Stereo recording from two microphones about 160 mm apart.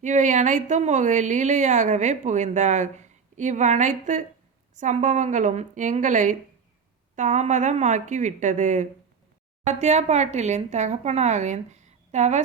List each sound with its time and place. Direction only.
0.0 s a woman's voice: 50° right (ahead or behind)